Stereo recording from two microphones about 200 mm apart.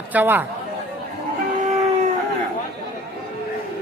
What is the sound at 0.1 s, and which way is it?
Speech, 10° right (ahead or behind).